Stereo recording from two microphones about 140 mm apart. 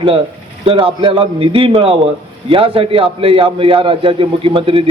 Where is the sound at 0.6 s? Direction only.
40° right (ahead or behind).